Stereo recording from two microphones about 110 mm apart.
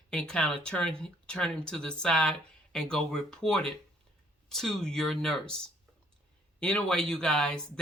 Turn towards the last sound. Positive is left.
turn(degrees=5)  # may be behind; listen again after turning